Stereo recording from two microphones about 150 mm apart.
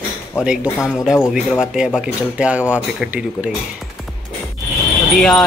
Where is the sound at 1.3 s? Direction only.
5° right (ahead or behind).